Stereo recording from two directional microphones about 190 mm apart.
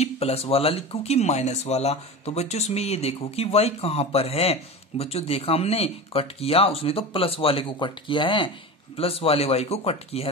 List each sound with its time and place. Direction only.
0.0 s speech: 35° left (ahead or behind)